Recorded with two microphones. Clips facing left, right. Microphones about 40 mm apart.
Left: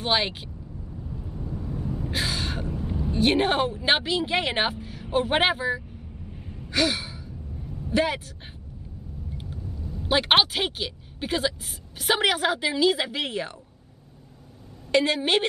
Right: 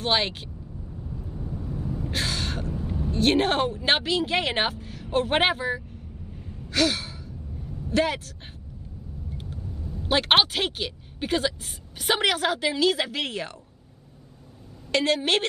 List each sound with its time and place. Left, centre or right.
0.0 s a sound: centre
1.7 s vehicle: centre
3.1 s speech: centre
6.3 s sigh: centre
7.9 s a man's voice: centre
10.0 s speech: centre
14.9 s speech: centre